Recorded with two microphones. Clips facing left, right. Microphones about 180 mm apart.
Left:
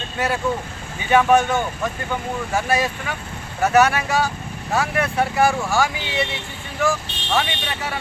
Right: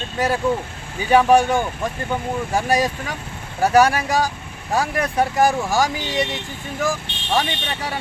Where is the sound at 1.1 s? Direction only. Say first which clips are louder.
Right 2 dB; 35° right (ahead or behind).